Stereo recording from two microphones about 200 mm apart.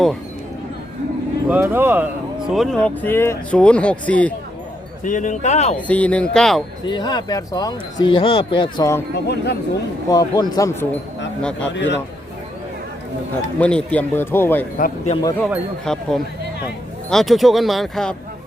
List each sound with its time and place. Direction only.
1.5 s speech: 10° right (ahead or behind)
2.5 s speech: centre (ahead or behind)
5.0 s speech: 40° left (ahead or behind)
5.7 s speech: 5° left (ahead or behind)
6.8 s speech: 20° left (ahead or behind)
9.1 s speech: 55° left (ahead or behind)
10.1 s speech: 20° left (ahead or behind)
11.7 s speech: 65° left (ahead or behind)
13.6 s speech: 5° left (ahead or behind)
14.8 s a man's voice: 45° left (ahead or behind)
15.1 s speech: 20° left (ahead or behind)
15.4 s speech: 5° left (ahead or behind)